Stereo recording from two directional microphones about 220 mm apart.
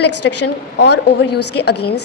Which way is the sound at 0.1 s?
90° left.